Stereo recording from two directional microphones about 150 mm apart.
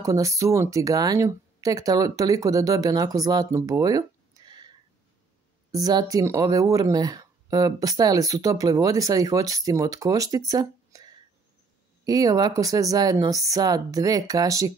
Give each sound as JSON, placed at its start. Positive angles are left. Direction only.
{"t": 0.0, "sound": "speech", "side_deg": -20}
{"t": 5.7, "sound": "speech", "side_deg": -25}